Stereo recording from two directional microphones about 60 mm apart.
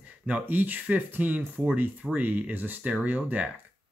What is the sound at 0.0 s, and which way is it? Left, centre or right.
Speech, right.